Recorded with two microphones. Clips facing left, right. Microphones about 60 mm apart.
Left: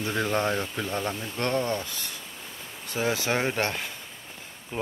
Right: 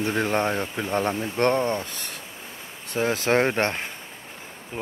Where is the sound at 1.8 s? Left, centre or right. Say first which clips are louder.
Right 2 dB; right.